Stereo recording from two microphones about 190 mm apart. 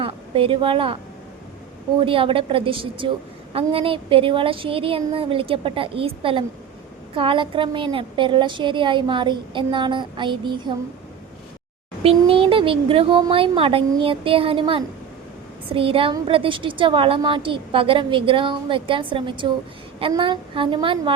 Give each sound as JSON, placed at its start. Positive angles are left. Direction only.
{"t": 0.0, "sound": "speech", "side_deg": -30}
{"t": 2.0, "sound": "a woman's voice", "side_deg": -30}
{"t": 12.0, "sound": "a woman's voice", "side_deg": -30}